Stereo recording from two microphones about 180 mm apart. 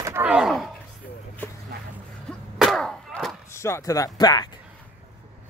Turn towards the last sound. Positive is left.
turn(degrees=20)  # may be behind; listen again after turning